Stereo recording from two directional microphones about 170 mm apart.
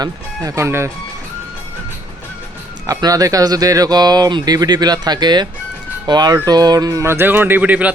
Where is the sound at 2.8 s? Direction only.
20° right (ahead or behind).